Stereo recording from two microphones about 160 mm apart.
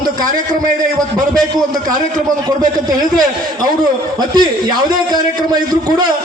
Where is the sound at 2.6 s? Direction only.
25° right (ahead or behind).